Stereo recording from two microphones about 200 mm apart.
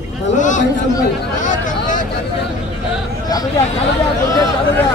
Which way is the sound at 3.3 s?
20° left (ahead or behind).